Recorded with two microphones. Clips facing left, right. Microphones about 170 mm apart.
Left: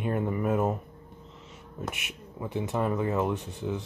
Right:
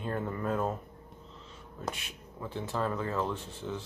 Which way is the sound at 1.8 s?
20° left (ahead or behind).